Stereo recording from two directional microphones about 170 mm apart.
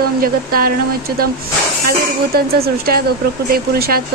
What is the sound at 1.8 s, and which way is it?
Speech, 60° right (ahead or behind).